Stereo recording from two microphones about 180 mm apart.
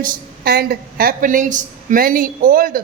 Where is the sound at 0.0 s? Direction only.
55° right (ahead or behind).